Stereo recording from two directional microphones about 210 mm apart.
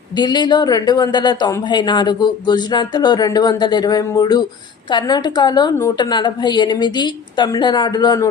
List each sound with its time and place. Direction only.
0.2 s speech: 20° left (ahead or behind)